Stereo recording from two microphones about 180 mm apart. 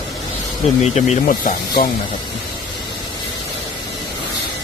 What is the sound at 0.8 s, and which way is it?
Speech, 40° left (ahead or behind).